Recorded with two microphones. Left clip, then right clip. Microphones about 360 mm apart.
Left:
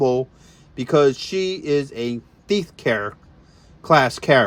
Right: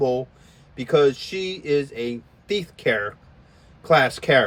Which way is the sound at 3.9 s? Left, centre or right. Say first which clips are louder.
Left 2 dB; centre.